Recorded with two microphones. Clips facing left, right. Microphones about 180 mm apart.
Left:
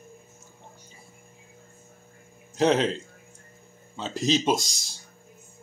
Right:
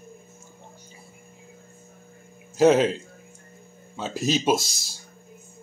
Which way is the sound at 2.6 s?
5° right (ahead or behind).